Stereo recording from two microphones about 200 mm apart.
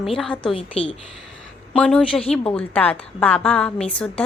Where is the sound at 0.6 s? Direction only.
25° left (ahead or behind).